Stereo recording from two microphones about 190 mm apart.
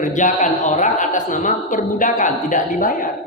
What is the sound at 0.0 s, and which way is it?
Speech, 40° left (ahead or behind).